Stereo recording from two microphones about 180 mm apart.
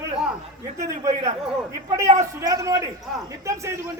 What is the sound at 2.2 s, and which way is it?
A man's voice, 20° right (ahead or behind).